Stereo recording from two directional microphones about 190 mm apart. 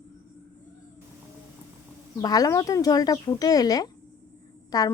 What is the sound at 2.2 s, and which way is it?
Speech, 20° left (ahead or behind).